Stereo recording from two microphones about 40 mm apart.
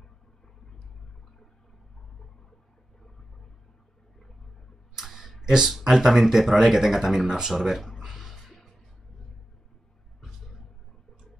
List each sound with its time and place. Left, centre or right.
4.9 s tick: centre
5.4 s speech: centre
8.0 s music: centre